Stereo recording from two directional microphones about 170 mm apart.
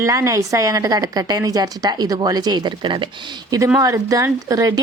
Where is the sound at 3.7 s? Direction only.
20° right (ahead or behind).